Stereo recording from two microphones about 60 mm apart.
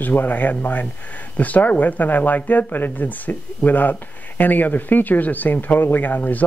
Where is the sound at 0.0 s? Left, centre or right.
Left.